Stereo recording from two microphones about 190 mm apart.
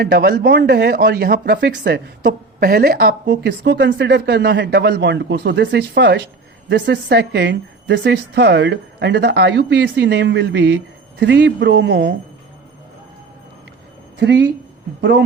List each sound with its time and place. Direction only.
0.0 s speech: 55° right (ahead or behind)
14.2 s speech: 70° right (ahead or behind)